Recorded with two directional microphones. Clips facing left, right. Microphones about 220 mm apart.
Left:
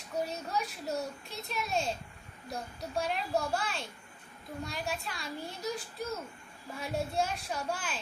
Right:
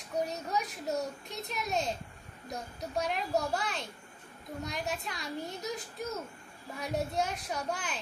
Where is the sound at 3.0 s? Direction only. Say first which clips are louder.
Right 1 dB; 20° right (ahead or behind).